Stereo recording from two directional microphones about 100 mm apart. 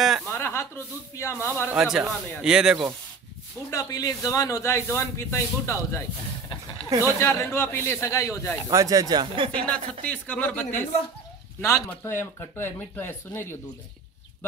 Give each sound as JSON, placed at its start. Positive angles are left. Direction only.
{"t": 0.3, "sound": "chuckle", "side_deg": 25}
{"t": 1.1, "sound": "speech", "side_deg": 25}
{"t": 1.8, "sound": "speech", "side_deg": -5}
{"t": 3.7, "sound": "speech", "side_deg": 35}
{"t": 6.9, "sound": "speech", "side_deg": -35}
{"t": 7.2, "sound": "speech", "side_deg": 25}
{"t": 8.1, "sound": "speech", "side_deg": 30}
{"t": 8.6, "sound": "speech", "side_deg": -35}
{"t": 9.5, "sound": "speech", "side_deg": 10}
{"t": 11.9, "sound": "speech", "side_deg": 20}